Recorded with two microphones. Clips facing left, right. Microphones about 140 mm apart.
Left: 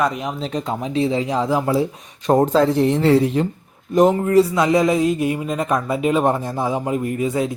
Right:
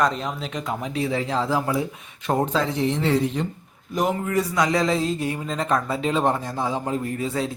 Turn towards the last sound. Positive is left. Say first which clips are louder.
# left 5 dB
turn(degrees=15)  # may be behind; listen again after turning